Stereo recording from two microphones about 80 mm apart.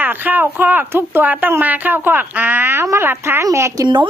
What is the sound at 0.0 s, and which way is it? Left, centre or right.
Speech, right.